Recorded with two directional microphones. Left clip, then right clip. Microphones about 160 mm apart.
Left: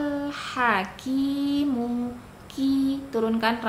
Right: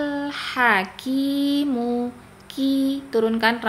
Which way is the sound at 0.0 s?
25° right (ahead or behind).